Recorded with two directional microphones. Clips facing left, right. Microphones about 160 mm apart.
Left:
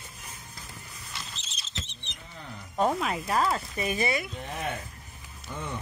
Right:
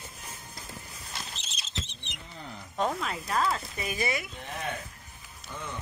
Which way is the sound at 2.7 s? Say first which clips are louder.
Left 4 dB; 10° left (ahead or behind).